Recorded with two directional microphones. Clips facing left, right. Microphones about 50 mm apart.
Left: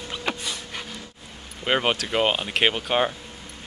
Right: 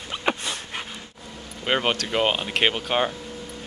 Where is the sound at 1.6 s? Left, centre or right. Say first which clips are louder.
Even; centre.